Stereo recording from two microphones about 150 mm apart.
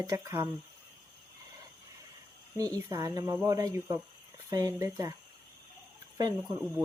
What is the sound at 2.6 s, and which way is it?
Speech, 25° right (ahead or behind).